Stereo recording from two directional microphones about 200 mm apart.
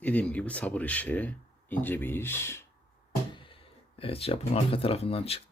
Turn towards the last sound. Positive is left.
turn(degrees=30)  # may be behind; listen again after turning